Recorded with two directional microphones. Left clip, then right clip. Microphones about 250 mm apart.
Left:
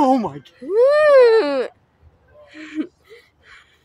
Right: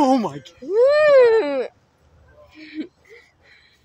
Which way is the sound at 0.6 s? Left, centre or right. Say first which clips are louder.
Left 1 dB; centre.